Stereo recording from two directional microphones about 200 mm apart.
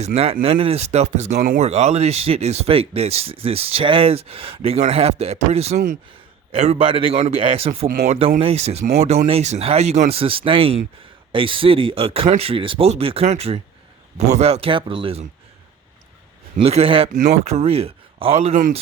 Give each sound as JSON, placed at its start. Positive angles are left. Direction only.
{"t": 0.0, "sound": "speech", "side_deg": -30}
{"t": 16.6, "sound": "speech", "side_deg": -30}